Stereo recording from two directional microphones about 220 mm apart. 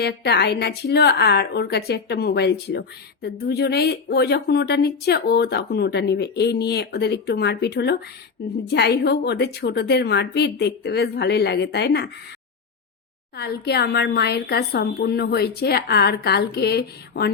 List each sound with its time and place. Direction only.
0.0 s a woman's voice: 50° left (ahead or behind)
13.3 s a woman's voice: 50° left (ahead or behind)